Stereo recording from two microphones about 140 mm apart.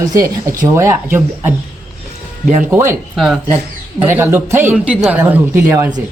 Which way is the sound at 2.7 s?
15° right (ahead or behind).